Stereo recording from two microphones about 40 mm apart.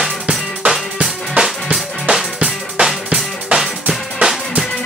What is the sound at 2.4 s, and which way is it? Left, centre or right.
Music, centre.